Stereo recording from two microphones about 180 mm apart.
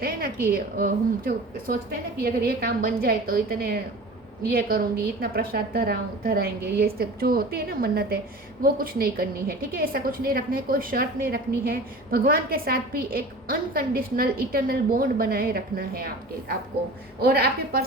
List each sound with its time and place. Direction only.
0.0 s a sound: 55° right (ahead or behind)
0.5 s a woman's voice: 55° right (ahead or behind)
17.2 s a woman's voice: 60° right (ahead or behind)